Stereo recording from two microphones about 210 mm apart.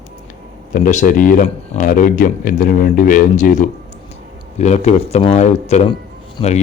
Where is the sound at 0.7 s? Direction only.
35° left (ahead or behind).